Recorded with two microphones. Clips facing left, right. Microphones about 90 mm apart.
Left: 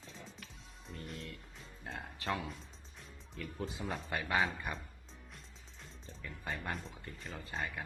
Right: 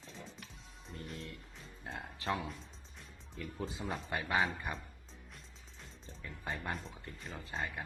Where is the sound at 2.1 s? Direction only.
30° right (ahead or behind).